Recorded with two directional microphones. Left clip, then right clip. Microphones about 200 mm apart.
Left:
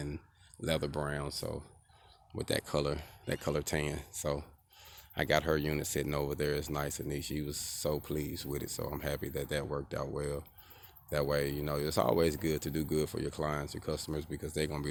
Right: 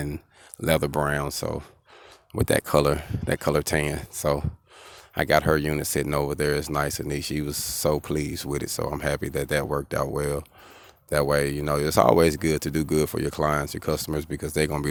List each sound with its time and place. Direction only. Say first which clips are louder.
0.6 s speech: right 11 dB; 40° right (ahead or behind)
2.3 s speech: right 12 dB; 35° right (ahead or behind)